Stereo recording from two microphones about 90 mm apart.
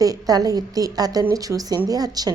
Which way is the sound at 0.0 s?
45° right (ahead or behind).